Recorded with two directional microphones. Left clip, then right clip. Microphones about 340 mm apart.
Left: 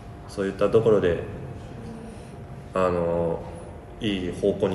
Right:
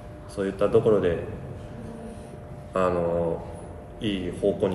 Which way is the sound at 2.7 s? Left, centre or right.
Centre.